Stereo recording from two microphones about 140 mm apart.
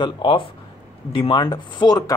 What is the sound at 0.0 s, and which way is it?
A man's voice, 35° left (ahead or behind).